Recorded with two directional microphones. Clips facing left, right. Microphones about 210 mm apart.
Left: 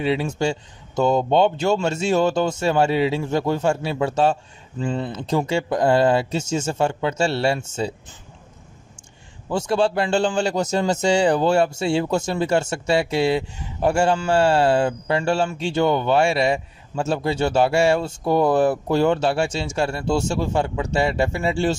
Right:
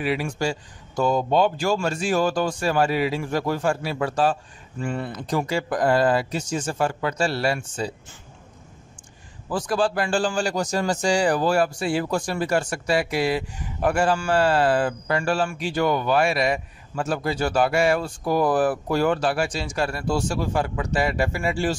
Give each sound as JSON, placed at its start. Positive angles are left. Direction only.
{"t": 0.0, "sound": "a man's voice", "side_deg": 25}
{"t": 9.5, "sound": "a man's voice", "side_deg": 25}